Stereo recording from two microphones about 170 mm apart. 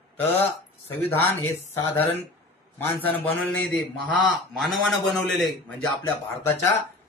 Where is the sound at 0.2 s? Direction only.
10° left (ahead or behind).